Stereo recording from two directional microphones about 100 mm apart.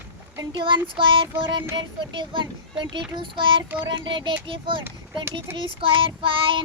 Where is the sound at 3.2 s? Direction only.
55° right (ahead or behind).